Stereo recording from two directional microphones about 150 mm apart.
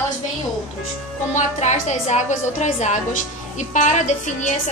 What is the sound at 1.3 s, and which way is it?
A woman's voice, 50° left (ahead or behind).